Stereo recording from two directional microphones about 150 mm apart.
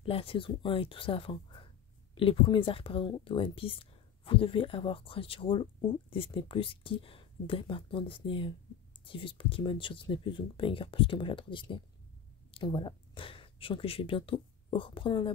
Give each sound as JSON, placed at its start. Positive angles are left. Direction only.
{"t": 0.0, "sound": "speech", "side_deg": 35}